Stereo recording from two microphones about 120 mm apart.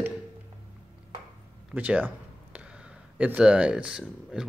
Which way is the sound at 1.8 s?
15° right (ahead or behind).